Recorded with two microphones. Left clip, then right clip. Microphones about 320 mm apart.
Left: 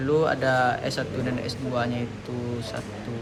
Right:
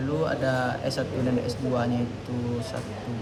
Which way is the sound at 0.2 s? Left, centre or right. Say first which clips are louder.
Left 2 dB; centre.